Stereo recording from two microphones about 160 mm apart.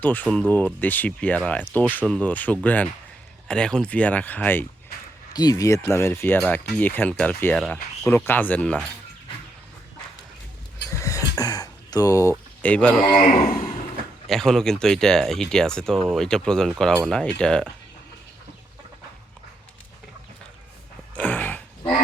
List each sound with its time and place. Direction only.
0.0 s speech: 10° left (ahead or behind)
5.3 s speech: 25° left (ahead or behind); by 8.9 s 10° left (ahead or behind)
10.8 s a sound: 20° left (ahead or behind)
12.6 s speech: 10° left (ahead or behind)
13.1 s a man's voice: 45° left (ahead or behind)
14.3 s speech: centre (ahead or behind)
21.2 s a sound: 10° left (ahead or behind)